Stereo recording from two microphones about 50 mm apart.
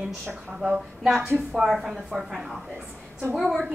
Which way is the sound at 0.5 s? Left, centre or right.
Centre.